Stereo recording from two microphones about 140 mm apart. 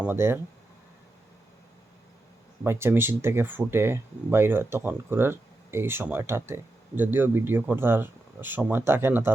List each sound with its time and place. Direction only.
0.0 s speech: 15° right (ahead or behind)
2.6 s speech: 15° right (ahead or behind)